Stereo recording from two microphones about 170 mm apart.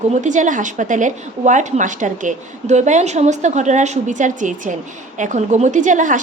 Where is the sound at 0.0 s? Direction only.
45° right (ahead or behind).